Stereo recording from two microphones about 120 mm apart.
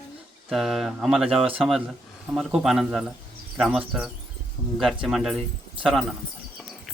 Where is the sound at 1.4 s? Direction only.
50° right (ahead or behind).